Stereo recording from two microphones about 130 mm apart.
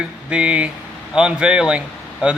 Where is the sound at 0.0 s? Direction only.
10° right (ahead or behind).